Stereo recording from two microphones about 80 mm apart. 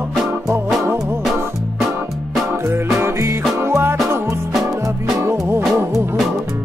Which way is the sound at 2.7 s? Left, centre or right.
Right.